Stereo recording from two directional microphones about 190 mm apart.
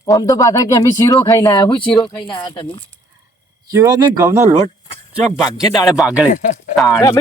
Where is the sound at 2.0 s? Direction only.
25° left (ahead or behind).